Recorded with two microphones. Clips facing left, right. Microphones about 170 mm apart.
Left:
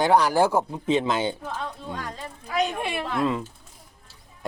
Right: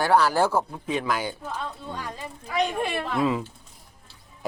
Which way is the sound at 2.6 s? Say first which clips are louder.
Even; 5° left (ahead or behind).